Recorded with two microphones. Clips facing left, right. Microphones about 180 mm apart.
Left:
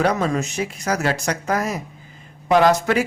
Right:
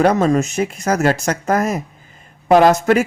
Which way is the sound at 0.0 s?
45° right (ahead or behind).